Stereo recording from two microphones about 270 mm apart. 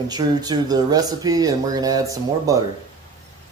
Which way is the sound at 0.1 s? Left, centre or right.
Centre.